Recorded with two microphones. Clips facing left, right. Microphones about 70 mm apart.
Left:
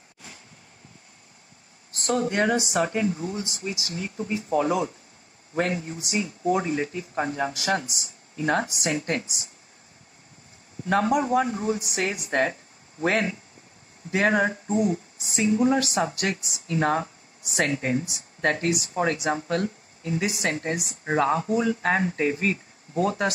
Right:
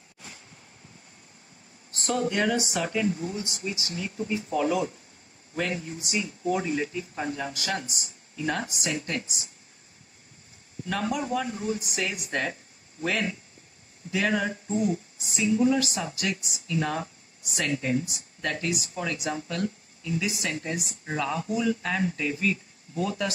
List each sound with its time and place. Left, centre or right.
2.0 s speech: left
2.5 s speech: left
2.8 s speech: left
10.9 s speech: left
16.7 s speech: left